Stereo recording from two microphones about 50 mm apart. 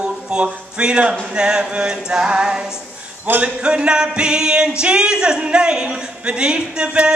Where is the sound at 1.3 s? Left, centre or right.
Centre.